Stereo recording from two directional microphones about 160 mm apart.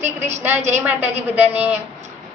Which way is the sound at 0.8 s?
15° right (ahead or behind).